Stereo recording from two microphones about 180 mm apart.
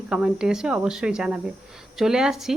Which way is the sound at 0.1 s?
5° right (ahead or behind).